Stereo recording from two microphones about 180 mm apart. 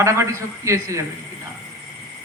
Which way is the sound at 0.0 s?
15° right (ahead or behind).